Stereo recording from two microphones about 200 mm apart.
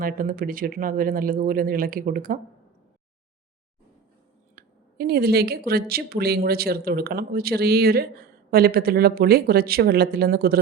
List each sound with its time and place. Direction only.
0.0 s speech: 45° right (ahead or behind)
4.5 s speech: 50° right (ahead or behind)